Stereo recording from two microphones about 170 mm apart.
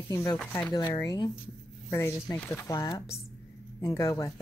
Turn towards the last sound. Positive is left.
turn(degrees=15)  # may be behind; listen again after turning